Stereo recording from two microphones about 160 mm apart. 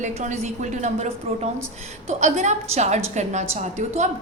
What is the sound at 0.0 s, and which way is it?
A woman's voice, 50° right (ahead or behind).